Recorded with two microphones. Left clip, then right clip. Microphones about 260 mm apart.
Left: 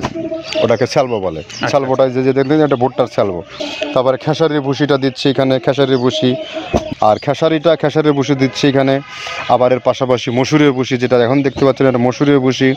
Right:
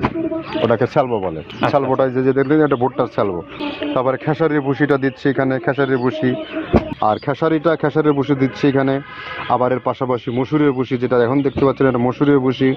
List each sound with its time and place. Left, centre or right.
0.6 s speech: left